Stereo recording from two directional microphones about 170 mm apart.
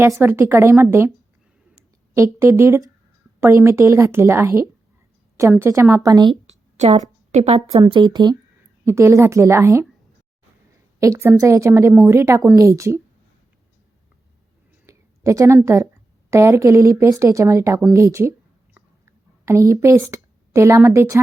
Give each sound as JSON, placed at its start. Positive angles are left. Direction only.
{"t": 0.2, "sound": "a woman's voice", "side_deg": -15}
{"t": 2.1, "sound": "a woman's voice", "side_deg": -15}
{"t": 6.5, "sound": "a woman's voice", "side_deg": -40}
{"t": 11.0, "sound": "a woman's voice", "side_deg": -15}
{"t": 14.8, "sound": "a sound", "side_deg": -20}
{"t": 16.3, "sound": "a woman's voice", "side_deg": -15}
{"t": 17.9, "sound": "a sound", "side_deg": -15}